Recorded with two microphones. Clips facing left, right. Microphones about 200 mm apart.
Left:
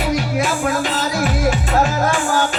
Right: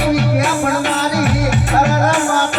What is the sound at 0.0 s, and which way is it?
Music, 60° right (ahead or behind).